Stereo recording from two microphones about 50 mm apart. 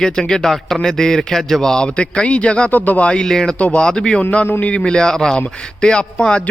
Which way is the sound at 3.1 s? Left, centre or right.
Centre.